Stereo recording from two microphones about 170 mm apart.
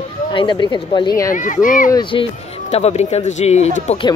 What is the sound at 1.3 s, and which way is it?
Speech, 50° left (ahead or behind).